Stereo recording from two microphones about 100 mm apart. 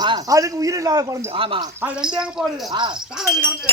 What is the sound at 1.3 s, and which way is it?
Speech, 65° right (ahead or behind).